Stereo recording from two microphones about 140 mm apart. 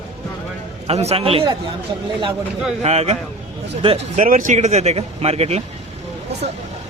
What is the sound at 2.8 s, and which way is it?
Speech, 50° right (ahead or behind).